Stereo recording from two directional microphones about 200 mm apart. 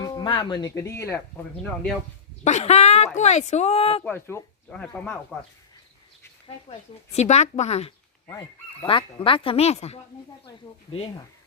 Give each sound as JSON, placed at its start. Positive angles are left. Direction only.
{"t": 0.0, "sound": "speech", "side_deg": 20}
{"t": 2.4, "sound": "speech", "side_deg": 35}
{"t": 4.0, "sound": "speech", "side_deg": 10}
{"t": 6.7, "sound": "speech", "side_deg": 30}
{"t": 8.3, "sound": "speech", "side_deg": 15}